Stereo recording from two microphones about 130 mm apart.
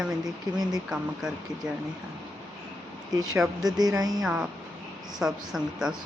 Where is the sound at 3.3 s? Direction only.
Centre (ahead or behind).